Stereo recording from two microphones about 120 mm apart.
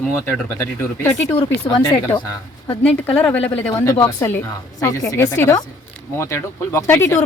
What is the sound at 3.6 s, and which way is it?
Speech, 20° left (ahead or behind).